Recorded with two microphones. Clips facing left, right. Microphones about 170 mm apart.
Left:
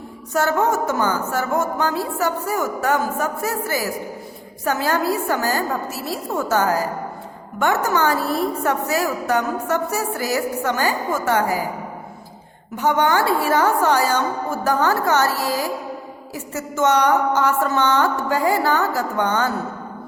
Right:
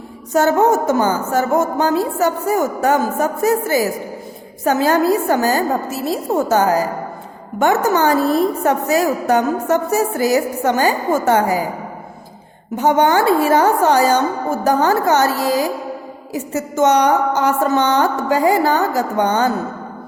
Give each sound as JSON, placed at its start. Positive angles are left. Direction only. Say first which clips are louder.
{"t": 0.3, "sound": "a woman's voice", "louder": "right 5 dB", "side_deg": -20}
{"t": 12.7, "sound": "a woman's voice", "louder": "right 4 dB", "side_deg": -20}